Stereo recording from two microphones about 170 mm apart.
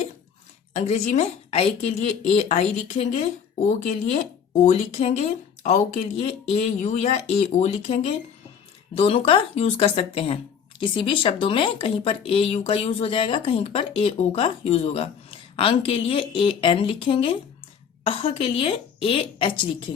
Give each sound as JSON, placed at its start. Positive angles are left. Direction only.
{"t": 0.7, "sound": "speech", "side_deg": 40}